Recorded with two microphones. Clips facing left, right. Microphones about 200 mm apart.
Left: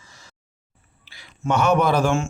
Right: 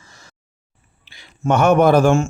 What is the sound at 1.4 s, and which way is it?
Speech, 50° right (ahead or behind).